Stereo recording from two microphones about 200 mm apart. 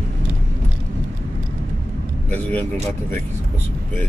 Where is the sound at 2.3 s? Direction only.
10° left (ahead or behind).